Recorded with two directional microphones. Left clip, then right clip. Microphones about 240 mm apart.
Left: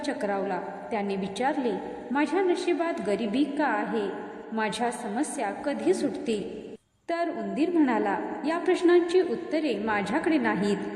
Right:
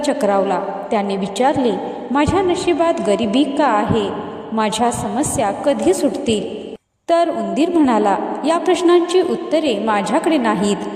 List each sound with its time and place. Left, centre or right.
0.0 s a woman's voice: right